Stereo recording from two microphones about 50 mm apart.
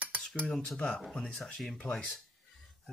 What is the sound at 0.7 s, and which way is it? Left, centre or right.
Speech, centre.